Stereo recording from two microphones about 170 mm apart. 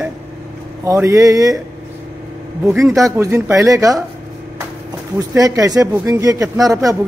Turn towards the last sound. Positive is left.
turn(degrees=-20)  # may be behind; listen again after turning